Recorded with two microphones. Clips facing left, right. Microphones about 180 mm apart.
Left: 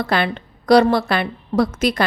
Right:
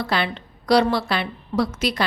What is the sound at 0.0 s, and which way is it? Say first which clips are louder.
A woman's voice: left 4 dB; 50° left (ahead or behind).